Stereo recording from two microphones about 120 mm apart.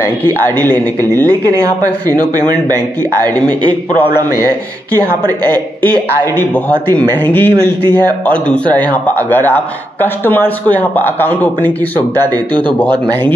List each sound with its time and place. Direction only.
0.0 s speech: 20° left (ahead or behind)
1.1 s speech: 30° right (ahead or behind)
6.3 s speech: 15° left (ahead or behind)
12.9 s speech: 15° left (ahead or behind)